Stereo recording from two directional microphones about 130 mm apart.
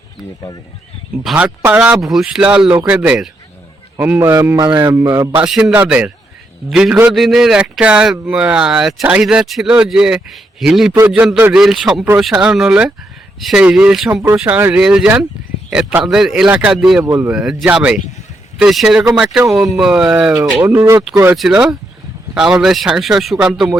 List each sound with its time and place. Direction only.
1.2 s a man's voice: centre (ahead or behind)
4.5 s a man's voice: 30° right (ahead or behind)
4.9 s speech: 20° right (ahead or behind)
5.4 s a man's voice: 5° right (ahead or behind)
14.1 s a man's voice: 20° right (ahead or behind); by 23.7 s 5° right (ahead or behind)